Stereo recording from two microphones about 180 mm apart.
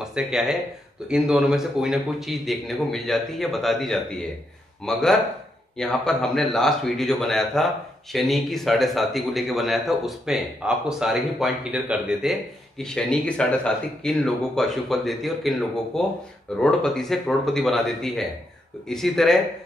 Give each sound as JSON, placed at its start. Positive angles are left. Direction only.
{"t": 0.0, "sound": "speech", "side_deg": -5}